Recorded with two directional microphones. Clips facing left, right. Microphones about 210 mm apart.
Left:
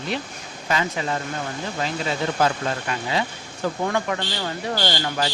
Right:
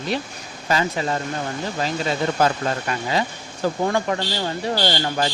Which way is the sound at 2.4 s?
45° right (ahead or behind).